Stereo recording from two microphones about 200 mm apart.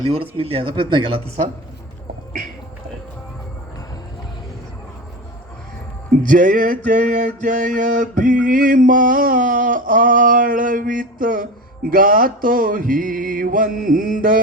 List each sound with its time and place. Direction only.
0.0 s speech: 25° right (ahead or behind)
6.2 s music: 40° right (ahead or behind)